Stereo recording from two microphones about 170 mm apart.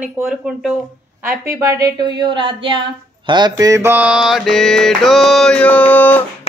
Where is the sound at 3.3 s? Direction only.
25° right (ahead or behind); by 6.2 s 10° left (ahead or behind).